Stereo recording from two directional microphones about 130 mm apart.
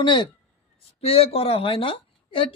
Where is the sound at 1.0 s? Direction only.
50° left (ahead or behind).